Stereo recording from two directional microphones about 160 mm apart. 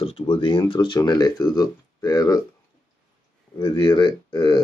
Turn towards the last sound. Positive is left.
turn(degrees=25)  # may be behind; listen again after turning